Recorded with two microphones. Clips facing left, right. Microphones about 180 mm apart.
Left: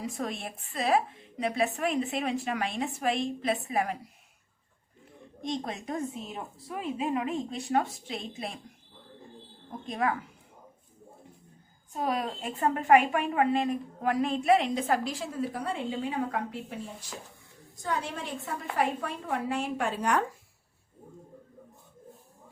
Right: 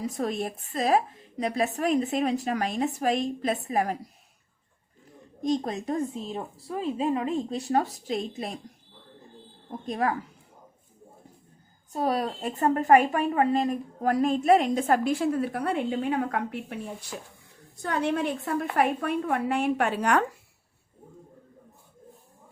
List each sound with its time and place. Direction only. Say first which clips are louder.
0.0 s a woman's voice: right 5 dB; 40° right (ahead or behind)
5.4 s a woman's voice: right 7 dB; 40° right (ahead or behind)
9.8 s a woman's voice: right 2 dB; 40° right (ahead or behind)
11.9 s a woman's voice: right 4 dB; 35° right (ahead or behind); by 20.2 s 75° right (ahead or behind)